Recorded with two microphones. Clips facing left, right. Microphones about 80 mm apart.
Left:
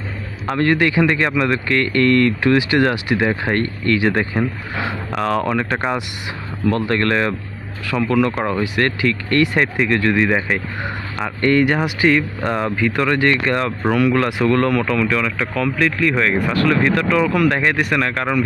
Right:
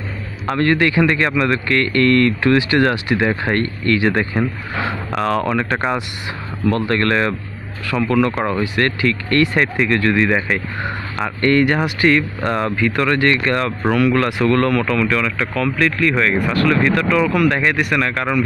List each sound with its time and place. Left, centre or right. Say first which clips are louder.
0.5 s speech: right 1 dB; centre; by 18.4 s left